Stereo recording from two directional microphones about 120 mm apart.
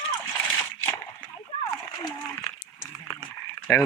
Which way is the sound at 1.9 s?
30° left (ahead or behind).